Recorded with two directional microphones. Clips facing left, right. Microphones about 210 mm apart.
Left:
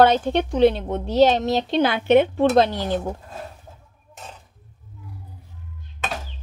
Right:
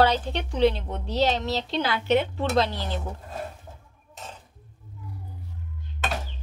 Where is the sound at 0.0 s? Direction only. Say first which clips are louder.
Left 6 dB; 50° left (ahead or behind).